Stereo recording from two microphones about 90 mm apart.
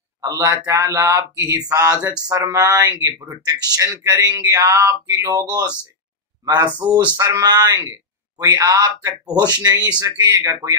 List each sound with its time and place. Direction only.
0.2 s speech: 40° right (ahead or behind)
7.2 s speech: 45° right (ahead or behind)